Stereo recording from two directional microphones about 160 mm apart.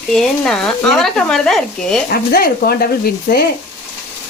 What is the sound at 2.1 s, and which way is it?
Frying, 70° left (ahead or behind).